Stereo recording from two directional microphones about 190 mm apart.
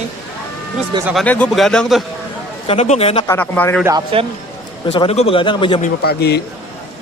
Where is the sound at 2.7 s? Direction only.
35° left (ahead or behind).